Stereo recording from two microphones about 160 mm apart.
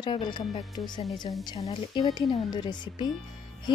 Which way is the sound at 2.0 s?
30° left (ahead or behind).